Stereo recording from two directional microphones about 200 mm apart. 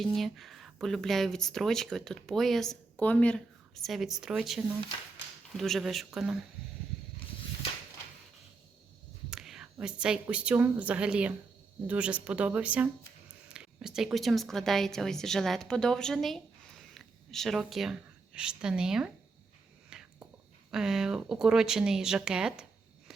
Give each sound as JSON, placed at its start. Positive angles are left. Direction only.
{"t": 0.0, "sound": "speech", "side_deg": 0}
{"t": 9.3, "sound": "whispering", "side_deg": -5}
{"t": 9.7, "sound": "a woman's voice", "side_deg": -5}
{"t": 19.9, "sound": "a sound", "side_deg": -5}
{"t": 20.7, "sound": "speech", "side_deg": -5}